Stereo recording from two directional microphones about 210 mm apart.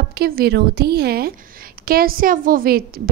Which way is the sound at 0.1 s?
50° right (ahead or behind).